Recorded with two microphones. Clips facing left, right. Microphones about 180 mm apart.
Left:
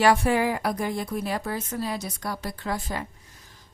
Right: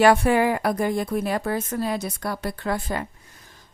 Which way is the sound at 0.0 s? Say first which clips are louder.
Right 4 dB; 60° right (ahead or behind).